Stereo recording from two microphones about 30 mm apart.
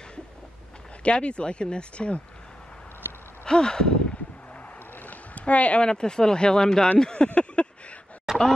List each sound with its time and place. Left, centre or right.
1.0 s speech: left
3.4 s speech: left
5.0 s a sound: left
5.4 s speech: left
5.8 s speech: left
7.6 s a sound: left
8.3 s chicken: centre